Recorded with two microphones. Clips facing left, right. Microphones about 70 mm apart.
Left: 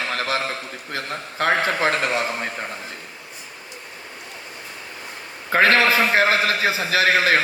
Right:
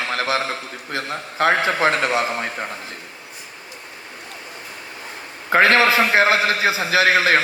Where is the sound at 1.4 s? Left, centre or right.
Right.